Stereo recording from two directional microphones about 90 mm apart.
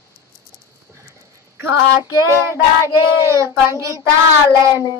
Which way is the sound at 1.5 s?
30° right (ahead or behind).